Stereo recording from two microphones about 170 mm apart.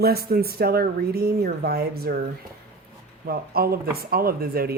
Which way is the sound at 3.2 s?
60° right (ahead or behind).